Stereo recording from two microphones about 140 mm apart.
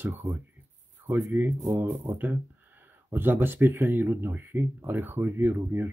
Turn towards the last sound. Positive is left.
turn(degrees=-15)  # may be behind; listen again after turning